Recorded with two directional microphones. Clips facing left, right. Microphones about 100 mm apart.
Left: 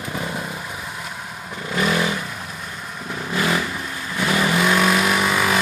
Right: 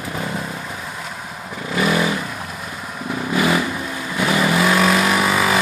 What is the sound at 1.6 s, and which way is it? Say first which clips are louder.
Vehicle: right 2 dB; centre (ahead or behind).